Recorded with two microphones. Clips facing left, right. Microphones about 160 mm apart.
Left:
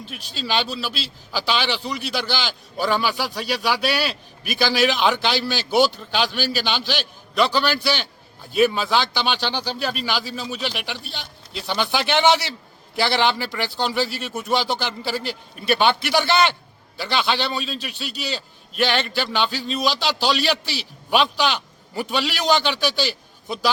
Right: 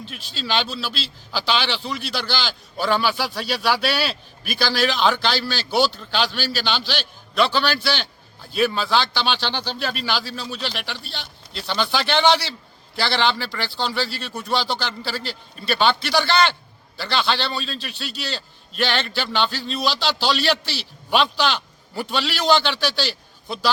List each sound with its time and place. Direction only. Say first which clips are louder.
0.1 s a man's voice: left 1 dB; 5° left (ahead or behind)